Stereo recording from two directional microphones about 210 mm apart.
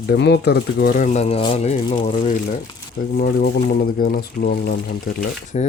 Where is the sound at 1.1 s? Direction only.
30° left (ahead or behind).